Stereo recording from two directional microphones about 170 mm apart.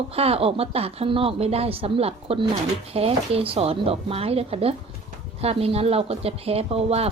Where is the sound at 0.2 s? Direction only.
35° right (ahead or behind).